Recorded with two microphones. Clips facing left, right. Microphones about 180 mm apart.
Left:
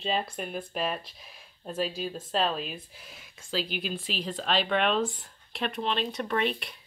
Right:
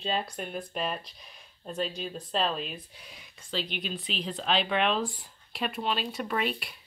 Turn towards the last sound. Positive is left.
turn(degrees=0)  # may be behind; listen again after turning